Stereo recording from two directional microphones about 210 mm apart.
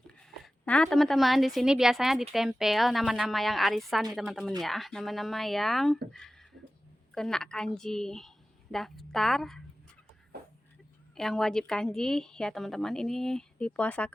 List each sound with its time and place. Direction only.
0.3 s a woman's voice: 5° left (ahead or behind)
11.2 s a woman's voice: centre (ahead or behind)